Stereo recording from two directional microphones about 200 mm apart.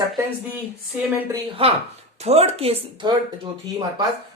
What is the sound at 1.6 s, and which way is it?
Speech, 25° right (ahead or behind).